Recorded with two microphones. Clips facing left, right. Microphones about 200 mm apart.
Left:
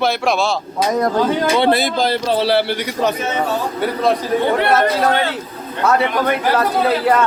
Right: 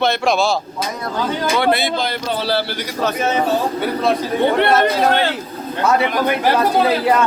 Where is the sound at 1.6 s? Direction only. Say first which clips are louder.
Left 2 dB; 35° left (ahead or behind).